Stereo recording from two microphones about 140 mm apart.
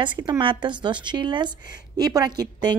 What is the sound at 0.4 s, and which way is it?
A woman's voice, 35° right (ahead or behind).